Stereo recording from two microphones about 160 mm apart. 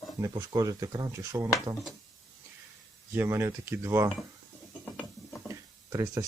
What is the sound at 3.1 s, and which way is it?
Speech, 15° right (ahead or behind).